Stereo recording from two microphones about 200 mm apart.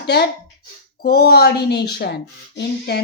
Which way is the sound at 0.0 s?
55° left (ahead or behind).